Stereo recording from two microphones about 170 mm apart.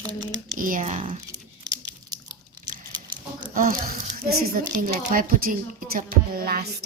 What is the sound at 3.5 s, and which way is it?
Speech, 55° right (ahead or behind).